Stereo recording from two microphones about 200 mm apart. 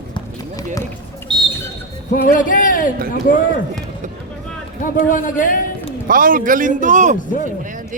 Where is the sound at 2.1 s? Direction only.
45° left (ahead or behind).